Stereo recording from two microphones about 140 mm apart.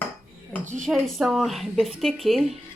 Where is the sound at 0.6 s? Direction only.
60° right (ahead or behind).